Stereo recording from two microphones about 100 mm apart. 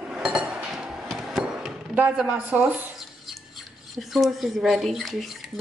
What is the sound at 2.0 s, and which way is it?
Speech, 10° right (ahead or behind).